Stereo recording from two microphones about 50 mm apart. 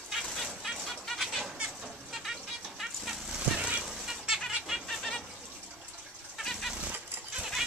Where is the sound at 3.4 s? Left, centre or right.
Right.